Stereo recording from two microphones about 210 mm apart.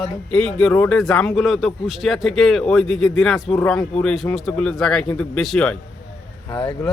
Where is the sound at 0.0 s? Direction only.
5° left (ahead or behind).